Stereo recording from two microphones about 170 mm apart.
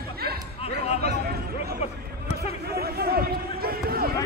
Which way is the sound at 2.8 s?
65° right (ahead or behind).